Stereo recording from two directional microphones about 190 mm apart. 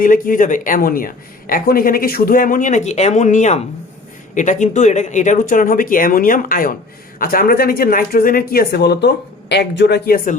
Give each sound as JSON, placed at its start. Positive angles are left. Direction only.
{"t": 0.0, "sound": "speech", "side_deg": 45}